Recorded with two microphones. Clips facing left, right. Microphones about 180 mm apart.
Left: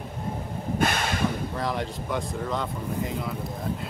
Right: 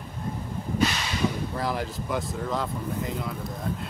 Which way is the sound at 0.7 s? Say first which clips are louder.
Left 1 dB; 55° left (ahead or behind).